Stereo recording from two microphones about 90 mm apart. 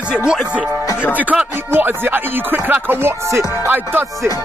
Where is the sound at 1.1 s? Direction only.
15° right (ahead or behind).